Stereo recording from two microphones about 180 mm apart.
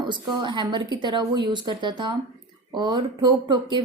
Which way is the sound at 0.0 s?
25° right (ahead or behind).